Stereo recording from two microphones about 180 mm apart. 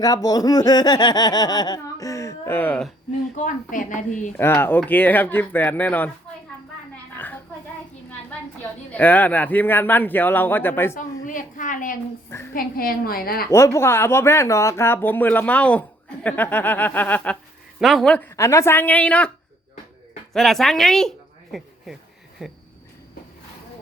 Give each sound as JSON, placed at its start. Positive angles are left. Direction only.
{"t": 0.0, "sound": "speech", "side_deg": 20}
{"t": 3.3, "sound": "a woman's voice", "side_deg": 45}
{"t": 4.3, "sound": "speech", "side_deg": 10}
{"t": 7.1, "sound": "oink", "side_deg": 10}
{"t": 8.9, "sound": "speech", "side_deg": 10}
{"t": 11.0, "sound": "a woman's voice", "side_deg": 45}
{"t": 13.5, "sound": "speech", "side_deg": 15}
{"t": 20.3, "sound": "speech", "side_deg": 0}